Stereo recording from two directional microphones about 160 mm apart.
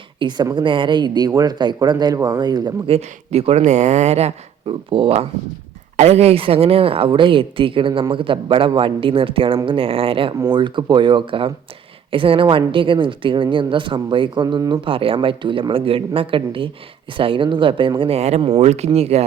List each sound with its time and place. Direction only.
0.2 s speech: 25° right (ahead or behind)
2.9 s a woman's voice: 40° right (ahead or behind)